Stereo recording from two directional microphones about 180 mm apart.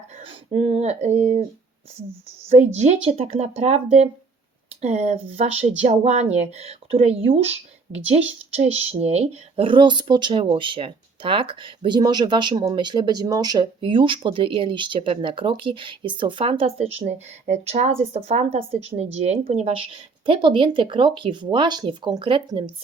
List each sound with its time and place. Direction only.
0.2 s speech: 30° right (ahead or behind)
2.7 s speech: 35° right (ahead or behind)